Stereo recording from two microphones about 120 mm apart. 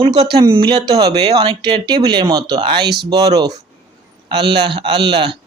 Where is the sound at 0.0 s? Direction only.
40° right (ahead or behind).